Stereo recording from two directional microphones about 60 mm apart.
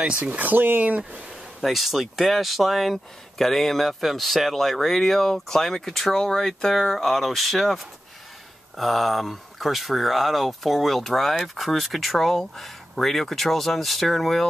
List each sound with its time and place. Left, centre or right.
0.0 s speech: right
1.3 s speech: centre